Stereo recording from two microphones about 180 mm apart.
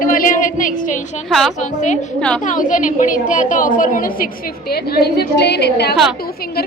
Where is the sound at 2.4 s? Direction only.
45° left (ahead or behind).